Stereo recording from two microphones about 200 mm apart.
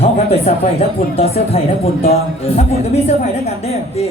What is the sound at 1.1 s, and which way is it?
A man's voice, 30° left (ahead or behind).